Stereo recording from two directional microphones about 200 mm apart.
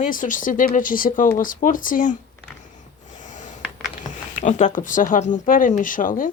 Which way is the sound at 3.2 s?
40° left (ahead or behind).